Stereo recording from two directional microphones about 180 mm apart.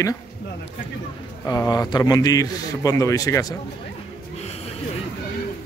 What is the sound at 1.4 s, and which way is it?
A man's voice, 20° left (ahead or behind).